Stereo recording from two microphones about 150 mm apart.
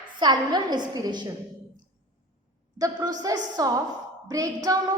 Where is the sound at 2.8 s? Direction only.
25° right (ahead or behind).